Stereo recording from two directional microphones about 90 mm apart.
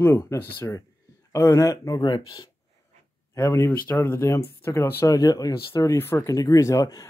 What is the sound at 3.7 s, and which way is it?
Speech, 20° left (ahead or behind).